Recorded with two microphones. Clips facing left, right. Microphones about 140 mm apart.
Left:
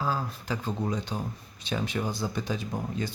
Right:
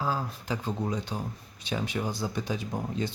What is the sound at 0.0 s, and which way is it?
Speech, 15° right (ahead or behind).